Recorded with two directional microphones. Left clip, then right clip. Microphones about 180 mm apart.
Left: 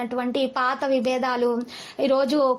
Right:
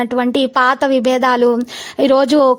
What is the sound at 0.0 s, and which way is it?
A woman's voice, 50° right (ahead or behind).